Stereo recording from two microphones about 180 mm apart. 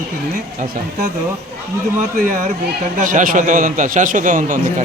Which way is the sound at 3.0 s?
50° right (ahead or behind).